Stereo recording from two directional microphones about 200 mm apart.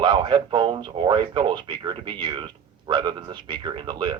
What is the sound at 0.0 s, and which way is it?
Speech, 20° right (ahead or behind).